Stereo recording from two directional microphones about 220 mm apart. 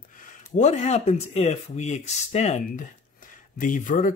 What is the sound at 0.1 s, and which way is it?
Speech, 35° left (ahead or behind).